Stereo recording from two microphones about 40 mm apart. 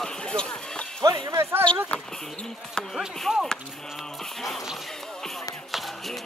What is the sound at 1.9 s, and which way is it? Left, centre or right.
Speech, left.